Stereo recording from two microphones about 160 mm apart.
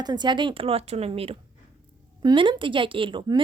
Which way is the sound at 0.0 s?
25° right (ahead or behind).